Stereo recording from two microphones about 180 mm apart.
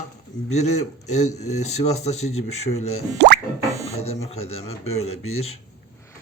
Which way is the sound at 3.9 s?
35° left (ahead or behind).